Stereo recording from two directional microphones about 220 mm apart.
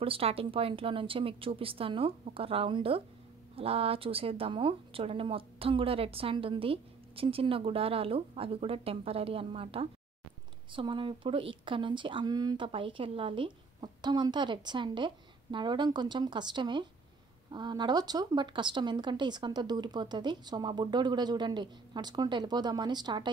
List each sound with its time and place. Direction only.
0.0 s speech: 25° right (ahead or behind)